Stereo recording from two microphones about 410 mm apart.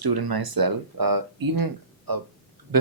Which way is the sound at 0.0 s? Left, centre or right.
Right.